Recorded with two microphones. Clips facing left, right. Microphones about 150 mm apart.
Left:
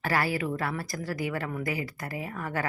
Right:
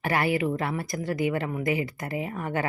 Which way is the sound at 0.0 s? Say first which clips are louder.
Right 3 dB; 20° right (ahead or behind).